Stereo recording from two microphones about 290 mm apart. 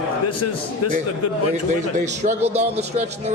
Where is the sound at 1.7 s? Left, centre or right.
Right.